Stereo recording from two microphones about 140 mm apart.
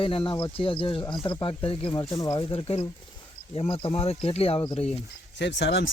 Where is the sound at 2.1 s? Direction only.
25° left (ahead or behind).